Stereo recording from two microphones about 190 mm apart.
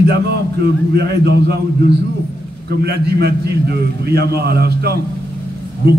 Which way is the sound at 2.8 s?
60° right (ahead or behind).